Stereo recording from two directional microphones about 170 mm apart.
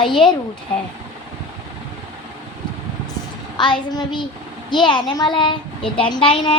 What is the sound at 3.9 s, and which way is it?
A child's voice, 30° left (ahead or behind).